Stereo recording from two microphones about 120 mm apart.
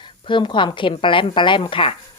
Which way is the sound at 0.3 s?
40° left (ahead or behind).